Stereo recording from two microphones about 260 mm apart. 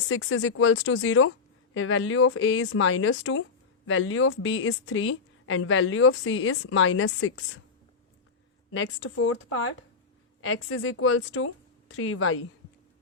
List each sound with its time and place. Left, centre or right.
0.1 s a woman's voice: left
8.7 s a woman's voice: left